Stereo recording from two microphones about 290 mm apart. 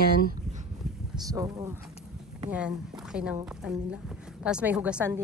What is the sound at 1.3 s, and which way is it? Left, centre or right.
A woman's voice, centre.